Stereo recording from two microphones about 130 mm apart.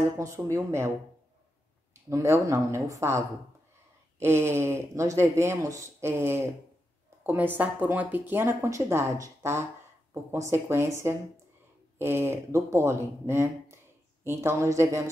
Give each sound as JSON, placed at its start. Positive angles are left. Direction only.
{"t": 0.2, "sound": "speech", "side_deg": -25}
{"t": 2.0, "sound": "speech", "side_deg": -25}